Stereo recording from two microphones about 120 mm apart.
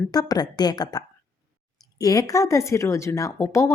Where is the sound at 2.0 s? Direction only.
30° left (ahead or behind).